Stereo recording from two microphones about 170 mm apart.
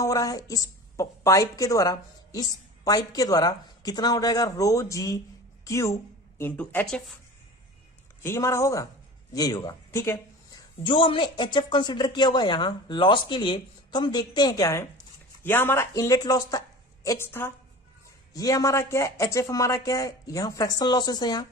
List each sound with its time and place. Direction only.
0.0 s a woman's voice: 20° left (ahead or behind)
8.2 s speech: 15° left (ahead or behind)
10.8 s a woman's voice: 30° left (ahead or behind)